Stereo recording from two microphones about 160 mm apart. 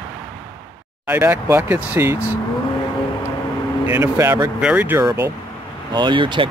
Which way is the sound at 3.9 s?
15° right (ahead or behind).